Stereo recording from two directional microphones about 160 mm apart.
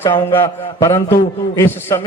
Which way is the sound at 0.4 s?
20° left (ahead or behind).